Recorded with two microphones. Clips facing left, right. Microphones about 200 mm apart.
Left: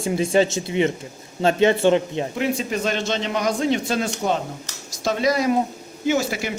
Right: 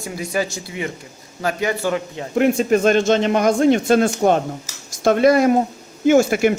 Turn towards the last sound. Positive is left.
turn(degrees=-55)  # may be behind; listen again after turning